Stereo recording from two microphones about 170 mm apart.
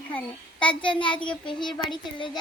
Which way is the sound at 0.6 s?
30° left (ahead or behind).